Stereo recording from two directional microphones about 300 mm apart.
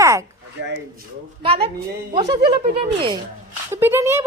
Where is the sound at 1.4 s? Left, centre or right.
Centre.